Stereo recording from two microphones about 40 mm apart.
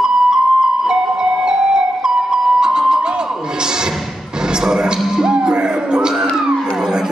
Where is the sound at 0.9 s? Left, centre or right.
Centre.